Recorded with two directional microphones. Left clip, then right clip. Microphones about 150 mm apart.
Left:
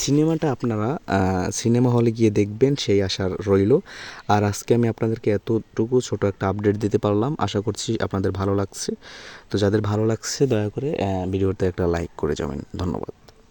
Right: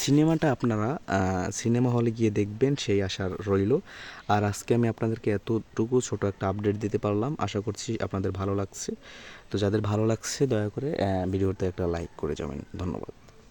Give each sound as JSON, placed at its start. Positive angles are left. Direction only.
{"t": 0.0, "sound": "speech", "side_deg": 0}
{"t": 0.7, "sound": "speech", "side_deg": 20}
{"t": 9.9, "sound": "speech", "side_deg": 15}
{"t": 11.6, "sound": "speech", "side_deg": 35}